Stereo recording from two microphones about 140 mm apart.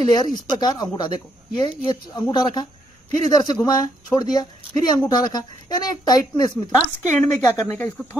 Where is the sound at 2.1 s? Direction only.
30° left (ahead or behind).